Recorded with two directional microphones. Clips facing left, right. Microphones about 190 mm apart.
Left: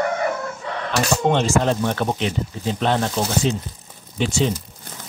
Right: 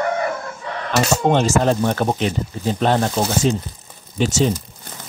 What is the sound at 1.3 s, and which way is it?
A man's voice, 40° right (ahead or behind).